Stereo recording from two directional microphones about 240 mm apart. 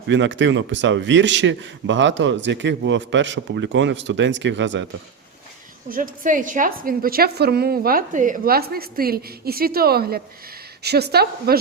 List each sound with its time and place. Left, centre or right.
0.1 s a man's voice: right
5.9 s a woman's voice: right